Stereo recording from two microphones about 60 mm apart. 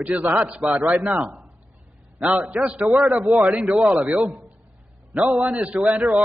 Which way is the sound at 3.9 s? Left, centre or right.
Right.